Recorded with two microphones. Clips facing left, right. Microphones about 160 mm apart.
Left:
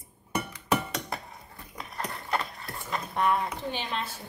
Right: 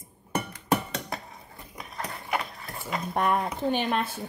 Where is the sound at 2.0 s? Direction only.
10° right (ahead or behind).